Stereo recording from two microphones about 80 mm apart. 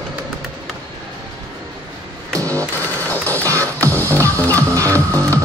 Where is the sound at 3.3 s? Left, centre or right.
Right.